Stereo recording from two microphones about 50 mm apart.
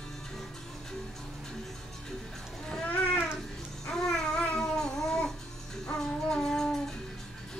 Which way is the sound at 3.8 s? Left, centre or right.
Centre.